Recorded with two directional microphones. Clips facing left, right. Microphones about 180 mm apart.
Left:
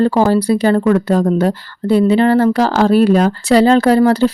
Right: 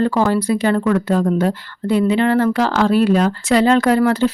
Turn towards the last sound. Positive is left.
turn(degrees=35)  # may be behind; listen again after turning